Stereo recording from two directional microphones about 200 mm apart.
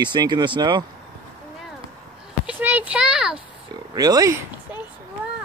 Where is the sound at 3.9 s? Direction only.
20° right (ahead or behind).